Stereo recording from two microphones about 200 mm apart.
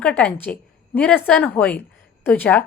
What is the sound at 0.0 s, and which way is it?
A woman's voice, 5° left (ahead or behind).